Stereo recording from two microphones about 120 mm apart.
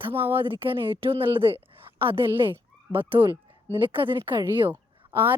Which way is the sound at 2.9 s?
20° right (ahead or behind).